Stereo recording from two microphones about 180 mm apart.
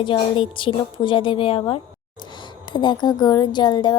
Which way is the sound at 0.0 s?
30° left (ahead or behind).